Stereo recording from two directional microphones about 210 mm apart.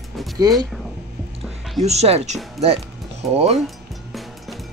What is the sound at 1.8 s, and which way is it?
Speech, 30° right (ahead or behind).